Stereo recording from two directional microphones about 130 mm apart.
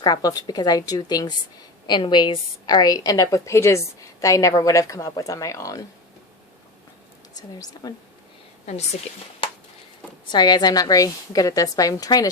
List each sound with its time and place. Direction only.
0.0 s a woman's voice: 30° left (ahead or behind)
7.3 s a woman's voice: 30° left (ahead or behind)
10.2 s a woman's voice: 35° left (ahead or behind)